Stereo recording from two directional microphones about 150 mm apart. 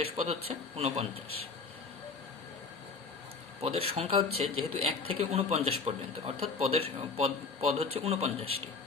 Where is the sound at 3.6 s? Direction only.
40° right (ahead or behind).